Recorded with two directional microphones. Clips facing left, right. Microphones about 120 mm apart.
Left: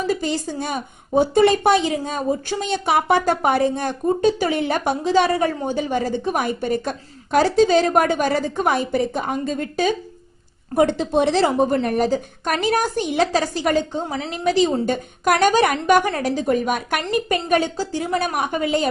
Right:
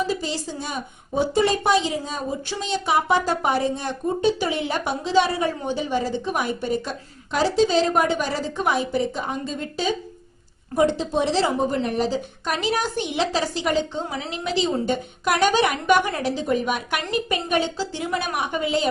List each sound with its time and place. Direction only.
0.1 s a woman's voice: 55° left (ahead or behind)